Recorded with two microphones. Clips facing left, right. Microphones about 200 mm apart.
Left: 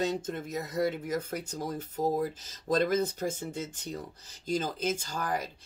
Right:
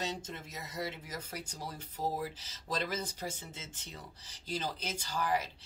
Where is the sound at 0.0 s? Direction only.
50° left (ahead or behind).